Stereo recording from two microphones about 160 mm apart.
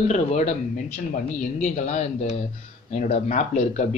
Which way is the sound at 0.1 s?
45° left (ahead or behind).